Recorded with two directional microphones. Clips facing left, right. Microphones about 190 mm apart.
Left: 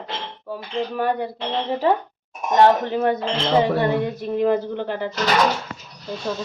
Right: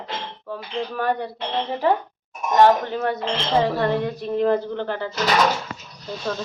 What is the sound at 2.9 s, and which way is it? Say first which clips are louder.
Speech: left 3 dB; 15° left (ahead or behind).